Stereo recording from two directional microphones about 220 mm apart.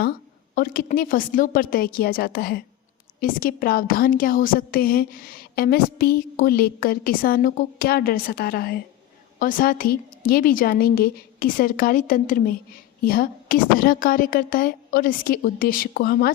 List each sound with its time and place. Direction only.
0.5 s a woman's voice: 40° left (ahead or behind)